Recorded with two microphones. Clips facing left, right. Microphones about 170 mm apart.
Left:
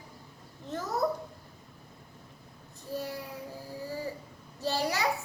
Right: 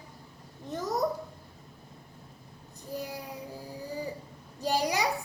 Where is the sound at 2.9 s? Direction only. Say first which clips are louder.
Left 1 dB; 15° right (ahead or behind).